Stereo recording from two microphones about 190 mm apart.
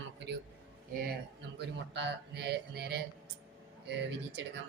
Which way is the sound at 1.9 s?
65° right (ahead or behind).